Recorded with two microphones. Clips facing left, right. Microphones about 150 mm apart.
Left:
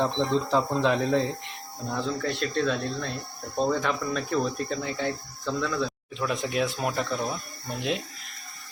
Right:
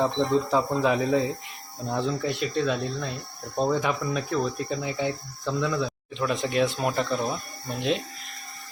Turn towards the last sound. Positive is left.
turn(degrees=0)  # may be behind; listen again after turning